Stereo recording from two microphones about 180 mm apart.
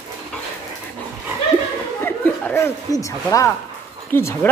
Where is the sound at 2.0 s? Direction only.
15° left (ahead or behind).